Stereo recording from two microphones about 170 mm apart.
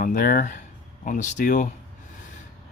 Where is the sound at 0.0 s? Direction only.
55° left (ahead or behind).